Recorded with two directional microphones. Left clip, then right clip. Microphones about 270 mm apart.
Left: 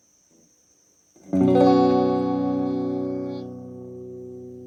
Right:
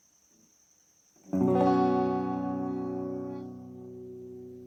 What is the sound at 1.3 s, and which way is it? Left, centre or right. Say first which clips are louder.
Music: left 8 dB; left.